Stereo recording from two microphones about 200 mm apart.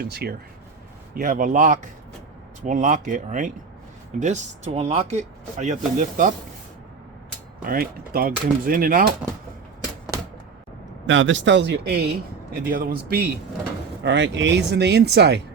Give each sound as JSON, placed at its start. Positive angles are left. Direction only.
{"t": 0.0, "sound": "speech", "side_deg": -50}
{"t": 7.6, "sound": "speech", "side_deg": -45}
{"t": 11.0, "sound": "speech", "side_deg": -70}
{"t": 14.0, "sound": "speech", "side_deg": -60}